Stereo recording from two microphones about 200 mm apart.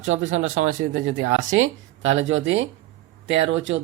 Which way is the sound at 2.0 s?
35° right (ahead or behind).